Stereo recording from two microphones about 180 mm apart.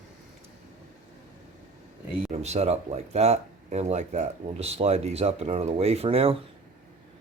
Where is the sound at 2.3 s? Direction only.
35° right (ahead or behind).